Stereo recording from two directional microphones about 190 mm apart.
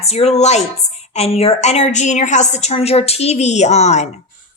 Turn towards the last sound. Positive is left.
turn(degrees=35)  # may be behind; listen again after turning